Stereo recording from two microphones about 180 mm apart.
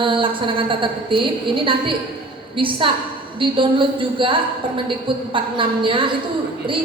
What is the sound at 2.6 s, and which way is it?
A woman's voice, 30° right (ahead or behind).